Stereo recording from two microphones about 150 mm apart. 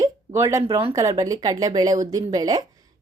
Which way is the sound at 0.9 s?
20° right (ahead or behind).